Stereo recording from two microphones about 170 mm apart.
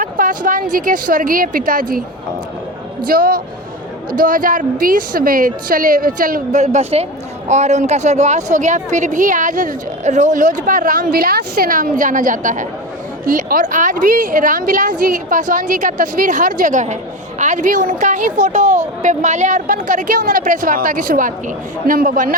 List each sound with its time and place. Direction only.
0.0 s a woman's voice: 50° right (ahead or behind)
3.1 s a woman's voice: 60° right (ahead or behind)